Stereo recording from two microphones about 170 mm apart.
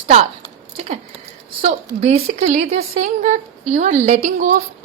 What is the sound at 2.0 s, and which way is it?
Speech, 40° right (ahead or behind).